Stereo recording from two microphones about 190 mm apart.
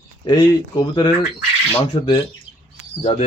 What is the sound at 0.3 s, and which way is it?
Speech, 20° left (ahead or behind).